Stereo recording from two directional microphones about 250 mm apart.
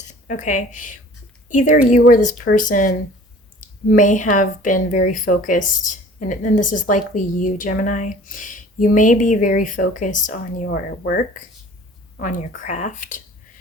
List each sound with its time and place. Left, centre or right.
0.1 s a woman's voice: left